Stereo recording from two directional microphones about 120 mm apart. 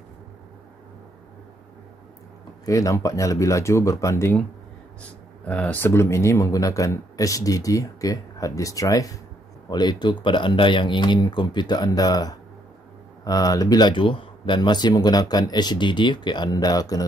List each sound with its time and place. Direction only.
2.6 s speech: 30° left (ahead or behind)
5.5 s speech: 10° left (ahead or behind); by 17.0 s 30° left (ahead or behind)